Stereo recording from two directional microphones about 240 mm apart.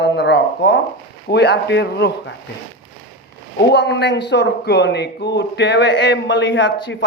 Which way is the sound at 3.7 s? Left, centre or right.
Left.